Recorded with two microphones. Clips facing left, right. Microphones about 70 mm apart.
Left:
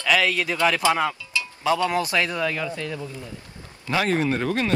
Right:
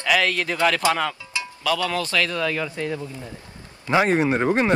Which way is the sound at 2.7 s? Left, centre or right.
Right.